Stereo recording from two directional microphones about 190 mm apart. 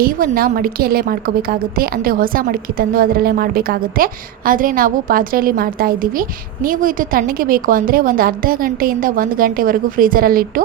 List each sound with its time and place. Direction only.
0.0 s a woman's voice: 50° right (ahead or behind)